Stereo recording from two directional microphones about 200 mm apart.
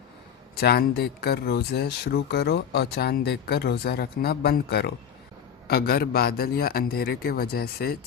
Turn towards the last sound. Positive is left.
turn(degrees=50)  # may be behind; listen again after turning